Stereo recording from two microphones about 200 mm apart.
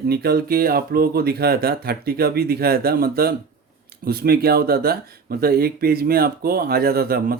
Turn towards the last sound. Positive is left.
turn(degrees=-50)  # may be behind; listen again after turning